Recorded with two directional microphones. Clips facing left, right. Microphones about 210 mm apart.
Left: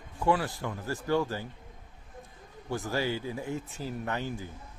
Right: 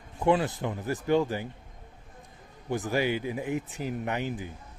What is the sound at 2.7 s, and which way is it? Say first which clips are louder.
Speech: right 3 dB; 15° right (ahead or behind).